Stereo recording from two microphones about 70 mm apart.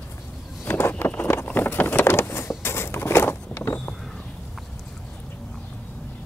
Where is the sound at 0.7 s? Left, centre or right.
Left.